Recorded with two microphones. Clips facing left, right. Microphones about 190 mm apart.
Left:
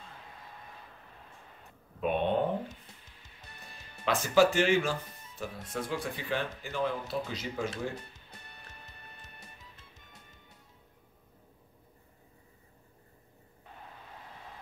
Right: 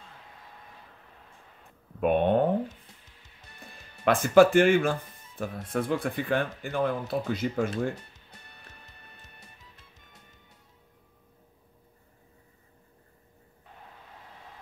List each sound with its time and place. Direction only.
2.0 s speech: 55° right (ahead or behind)
4.0 s speech: 55° right (ahead or behind)